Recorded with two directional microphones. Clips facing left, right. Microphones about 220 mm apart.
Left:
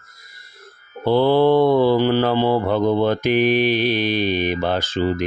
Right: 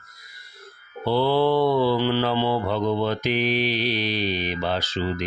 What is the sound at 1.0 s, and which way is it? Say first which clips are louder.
Speech: left 5 dB; 50° left (ahead or behind).